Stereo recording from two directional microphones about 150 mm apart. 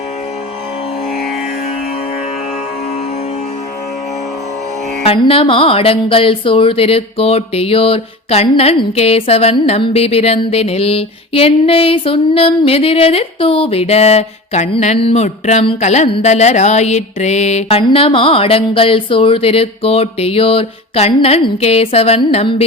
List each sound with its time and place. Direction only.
5.0 s speech: 35° left (ahead or behind)